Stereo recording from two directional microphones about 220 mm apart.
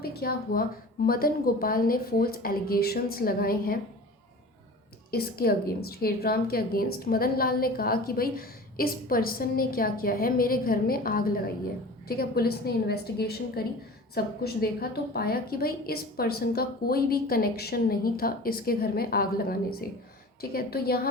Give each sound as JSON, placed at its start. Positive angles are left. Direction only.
{"t": 0.0, "sound": "a woman's voice", "side_deg": 45}
{"t": 5.1, "sound": "a woman's voice", "side_deg": 45}